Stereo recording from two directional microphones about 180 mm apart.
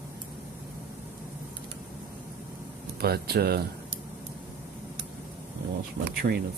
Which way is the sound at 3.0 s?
60° right (ahead or behind).